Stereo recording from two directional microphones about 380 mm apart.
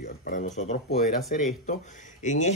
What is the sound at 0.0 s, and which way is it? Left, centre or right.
Speech, left.